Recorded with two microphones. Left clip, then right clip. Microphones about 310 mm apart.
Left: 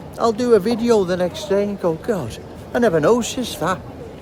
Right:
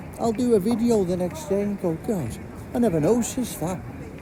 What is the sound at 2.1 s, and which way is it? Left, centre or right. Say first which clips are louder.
Speech: left 5 dB; left.